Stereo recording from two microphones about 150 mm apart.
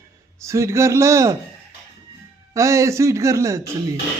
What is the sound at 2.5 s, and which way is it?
A man's voice, 20° right (ahead or behind).